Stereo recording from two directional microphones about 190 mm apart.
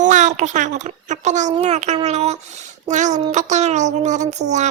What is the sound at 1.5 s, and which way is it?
Music, 35° right (ahead or behind).